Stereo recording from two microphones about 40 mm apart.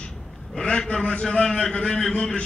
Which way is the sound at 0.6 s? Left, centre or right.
Left.